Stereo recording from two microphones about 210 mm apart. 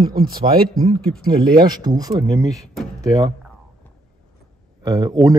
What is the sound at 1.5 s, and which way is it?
Speech, 20° right (ahead or behind).